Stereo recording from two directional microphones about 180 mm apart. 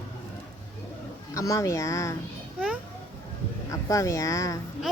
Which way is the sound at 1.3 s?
20° left (ahead or behind).